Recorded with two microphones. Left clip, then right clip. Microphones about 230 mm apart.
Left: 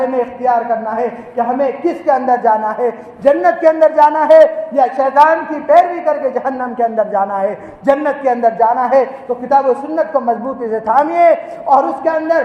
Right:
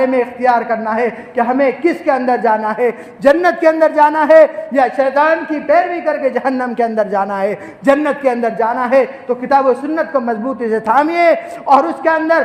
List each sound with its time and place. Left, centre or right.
0.0 s a man's voice: right
5.6 s a man's voice: right